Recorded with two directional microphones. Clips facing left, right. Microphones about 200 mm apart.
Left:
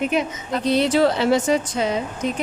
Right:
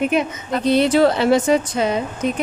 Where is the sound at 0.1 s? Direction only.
55° right (ahead or behind).